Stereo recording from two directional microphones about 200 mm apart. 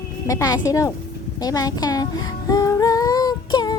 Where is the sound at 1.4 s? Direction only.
20° left (ahead or behind).